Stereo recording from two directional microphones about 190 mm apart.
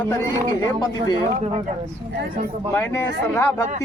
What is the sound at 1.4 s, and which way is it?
Speech, 35° right (ahead or behind).